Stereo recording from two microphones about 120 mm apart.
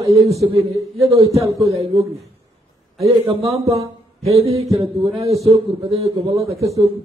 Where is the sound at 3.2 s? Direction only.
55° right (ahead or behind).